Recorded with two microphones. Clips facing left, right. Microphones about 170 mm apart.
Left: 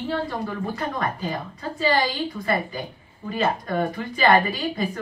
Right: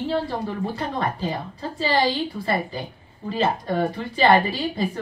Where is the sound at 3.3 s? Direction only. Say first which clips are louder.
Right 1 dB; 30° right (ahead or behind).